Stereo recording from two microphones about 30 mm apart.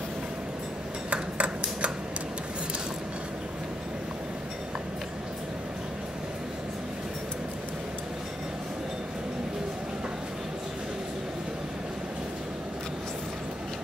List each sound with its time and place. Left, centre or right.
1.1 s ping: right